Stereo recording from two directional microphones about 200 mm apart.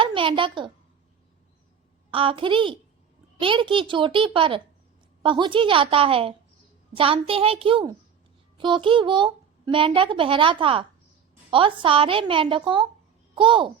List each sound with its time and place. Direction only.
0.0 s a woman's voice: 25° right (ahead or behind)
2.0 s a child's voice: 25° right (ahead or behind)